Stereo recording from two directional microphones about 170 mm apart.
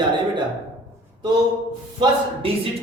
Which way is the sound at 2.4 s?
35° right (ahead or behind).